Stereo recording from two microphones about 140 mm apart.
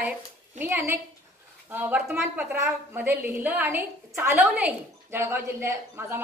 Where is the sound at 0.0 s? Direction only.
10° right (ahead or behind).